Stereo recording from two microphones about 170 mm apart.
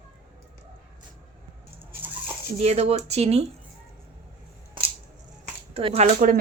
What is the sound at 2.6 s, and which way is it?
Speech, 40° right (ahead or behind).